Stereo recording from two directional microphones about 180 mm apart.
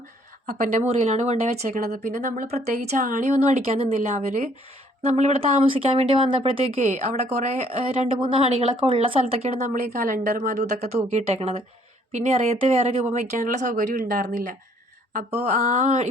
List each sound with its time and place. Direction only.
0.4 s speech: 40° right (ahead or behind)
3.0 s speech: 50° right (ahead or behind)
3.6 s speech: 35° right (ahead or behind)
9.9 s speech: 50° right (ahead or behind)